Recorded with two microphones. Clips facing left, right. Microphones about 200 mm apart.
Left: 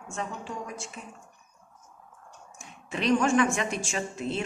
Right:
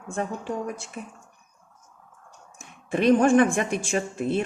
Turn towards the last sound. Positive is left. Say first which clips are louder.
# right 6 dB
turn(degrees=-55)  # may be behind; listen again after turning